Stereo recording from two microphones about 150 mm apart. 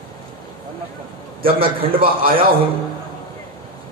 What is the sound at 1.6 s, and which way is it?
Speech, 35° right (ahead or behind).